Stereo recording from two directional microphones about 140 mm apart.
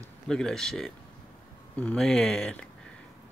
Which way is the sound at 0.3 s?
5° left (ahead or behind).